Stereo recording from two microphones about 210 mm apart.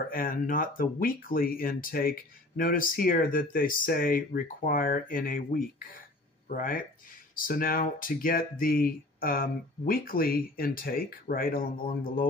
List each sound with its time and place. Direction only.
0.1 s speech: 40° left (ahead or behind)